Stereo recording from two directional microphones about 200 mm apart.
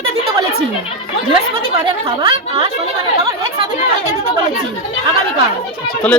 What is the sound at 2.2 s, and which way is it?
Speech, 20° right (ahead or behind).